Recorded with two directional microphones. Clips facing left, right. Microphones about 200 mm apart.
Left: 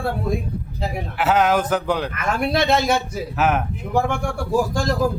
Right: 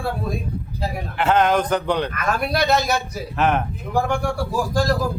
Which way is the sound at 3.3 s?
5° left (ahead or behind).